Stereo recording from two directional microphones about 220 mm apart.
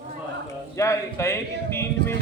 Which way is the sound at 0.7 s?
15° left (ahead or behind).